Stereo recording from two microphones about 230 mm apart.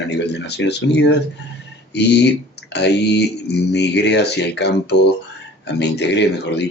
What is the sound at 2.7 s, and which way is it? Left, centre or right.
Speech, left.